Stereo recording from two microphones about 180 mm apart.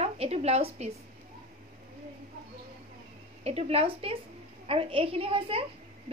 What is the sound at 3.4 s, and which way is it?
A woman's voice, 35° right (ahead or behind).